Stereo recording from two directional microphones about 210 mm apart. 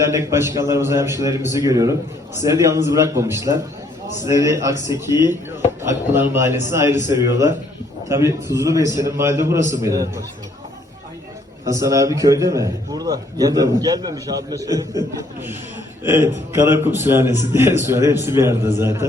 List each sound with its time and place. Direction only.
0.0 s a man's voice: 15° right (ahead or behind)
8.8 s a man's voice: 20° left (ahead or behind)
9.0 s a man's voice: 10° right (ahead or behind)
11.6 s a man's voice: 15° right (ahead or behind)